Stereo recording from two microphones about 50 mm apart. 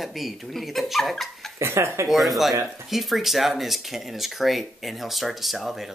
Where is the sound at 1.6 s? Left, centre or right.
Right.